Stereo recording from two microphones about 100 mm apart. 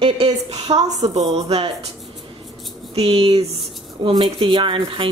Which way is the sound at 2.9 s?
75° right (ahead or behind).